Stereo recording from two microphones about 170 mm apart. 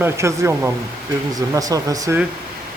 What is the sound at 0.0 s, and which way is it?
Speech, 15° right (ahead or behind).